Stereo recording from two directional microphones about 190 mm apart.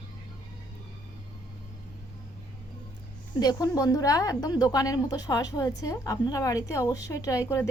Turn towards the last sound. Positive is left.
turn(degrees=15)  # may be behind; listen again after turning